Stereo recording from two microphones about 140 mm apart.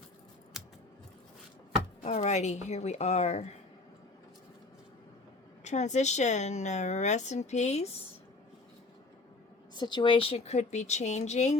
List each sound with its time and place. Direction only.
2.0 s a woman's voice: 55° left (ahead or behind)
5.6 s a woman's voice: 55° left (ahead or behind)
9.7 s a woman's voice: 30° left (ahead or behind); by 11.5 s 55° left (ahead or behind)